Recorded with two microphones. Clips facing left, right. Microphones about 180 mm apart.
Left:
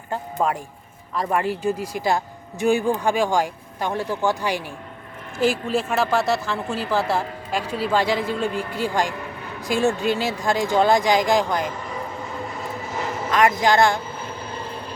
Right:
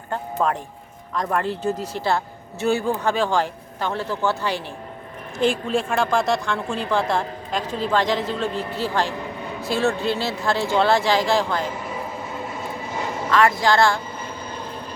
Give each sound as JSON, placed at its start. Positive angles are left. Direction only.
{"t": 0.1, "sound": "music", "side_deg": 10}
{"t": 1.1, "sound": "a woman's voice", "side_deg": 5}
{"t": 12.5, "sound": "vehicle", "side_deg": 0}
{"t": 13.6, "sound": "a woman's voice", "side_deg": 20}